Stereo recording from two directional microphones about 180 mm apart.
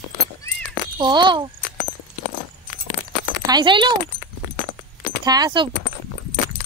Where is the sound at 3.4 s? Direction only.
25° right (ahead or behind).